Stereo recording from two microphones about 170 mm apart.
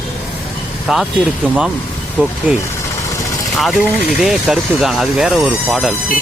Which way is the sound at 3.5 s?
Centre (ahead or behind).